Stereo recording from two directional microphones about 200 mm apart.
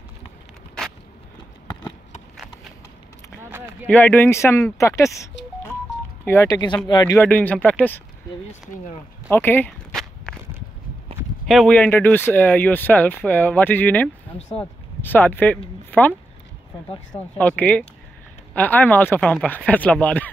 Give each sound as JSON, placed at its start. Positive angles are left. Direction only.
{"t": 3.8, "sound": "speech", "side_deg": 10}
{"t": 7.2, "sound": "speech", "side_deg": 5}
{"t": 9.3, "sound": "walk", "side_deg": 10}
{"t": 11.1, "sound": "a sound", "side_deg": -25}
{"t": 11.4, "sound": "speech", "side_deg": 0}
{"t": 17.4, "sound": "speech", "side_deg": 5}